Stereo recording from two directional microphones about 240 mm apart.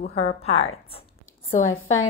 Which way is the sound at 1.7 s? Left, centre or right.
Left.